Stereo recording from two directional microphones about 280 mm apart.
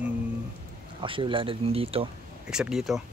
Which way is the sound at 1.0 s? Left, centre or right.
Centre.